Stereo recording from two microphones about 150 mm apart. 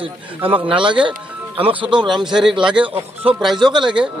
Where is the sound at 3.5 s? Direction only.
30° right (ahead or behind).